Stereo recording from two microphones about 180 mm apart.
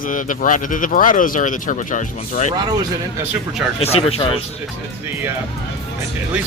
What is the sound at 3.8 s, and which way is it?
Speech, 35° left (ahead or behind).